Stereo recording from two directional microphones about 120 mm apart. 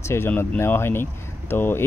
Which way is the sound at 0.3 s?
20° left (ahead or behind).